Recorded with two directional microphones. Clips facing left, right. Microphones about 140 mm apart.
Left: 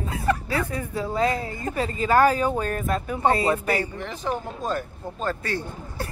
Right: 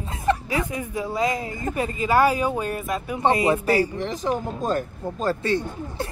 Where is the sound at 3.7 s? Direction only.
35° right (ahead or behind).